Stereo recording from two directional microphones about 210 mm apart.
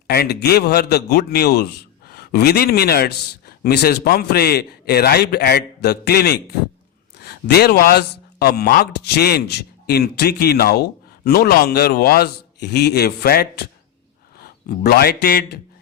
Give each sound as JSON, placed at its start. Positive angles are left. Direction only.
{"t": 0.1, "sound": "speech", "side_deg": 50}